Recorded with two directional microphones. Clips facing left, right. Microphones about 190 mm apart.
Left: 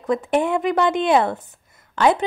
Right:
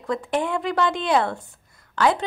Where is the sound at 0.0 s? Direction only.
20° left (ahead or behind).